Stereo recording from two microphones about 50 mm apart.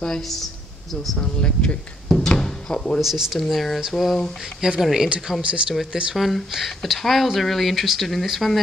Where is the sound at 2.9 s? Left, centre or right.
Centre.